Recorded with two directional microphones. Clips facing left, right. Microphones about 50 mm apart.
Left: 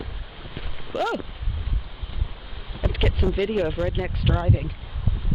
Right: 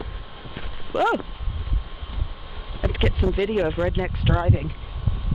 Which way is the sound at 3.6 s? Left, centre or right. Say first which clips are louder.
Right 2 dB; centre.